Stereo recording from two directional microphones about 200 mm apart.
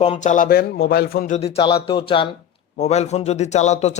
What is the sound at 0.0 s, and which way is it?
Speech, 35° left (ahead or behind).